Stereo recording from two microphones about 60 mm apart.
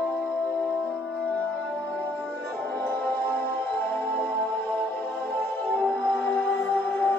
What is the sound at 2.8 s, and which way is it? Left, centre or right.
Music, left.